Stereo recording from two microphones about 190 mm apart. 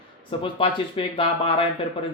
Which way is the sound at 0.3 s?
30° left (ahead or behind).